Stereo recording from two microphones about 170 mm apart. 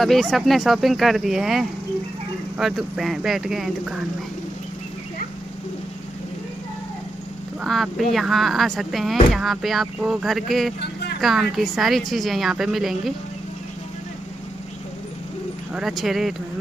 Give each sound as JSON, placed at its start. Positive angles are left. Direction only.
{"t": 0.0, "sound": "speech", "side_deg": 0}
{"t": 7.6, "sound": "a woman's voice", "side_deg": 0}
{"t": 15.7, "sound": "speech", "side_deg": 0}